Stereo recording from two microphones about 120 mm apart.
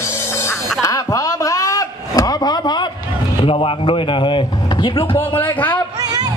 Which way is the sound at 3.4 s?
45° left (ahead or behind).